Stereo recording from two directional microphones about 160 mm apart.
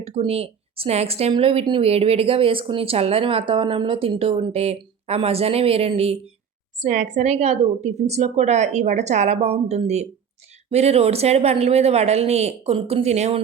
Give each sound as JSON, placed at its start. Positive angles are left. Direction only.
{"t": 0.0, "sound": "speech", "side_deg": -35}
{"t": 6.8, "sound": "a woman's voice", "side_deg": -50}